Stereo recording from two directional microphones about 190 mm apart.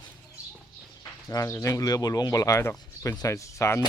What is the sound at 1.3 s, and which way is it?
Speech, 15° left (ahead or behind).